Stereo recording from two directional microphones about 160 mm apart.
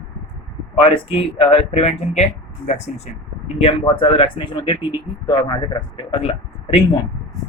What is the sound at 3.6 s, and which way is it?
A man's voice, 35° left (ahead or behind).